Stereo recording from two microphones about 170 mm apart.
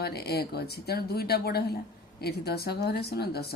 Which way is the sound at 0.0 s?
70° left (ahead or behind).